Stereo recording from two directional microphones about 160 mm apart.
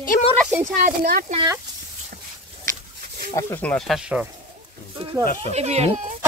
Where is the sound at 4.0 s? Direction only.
5° right (ahead or behind).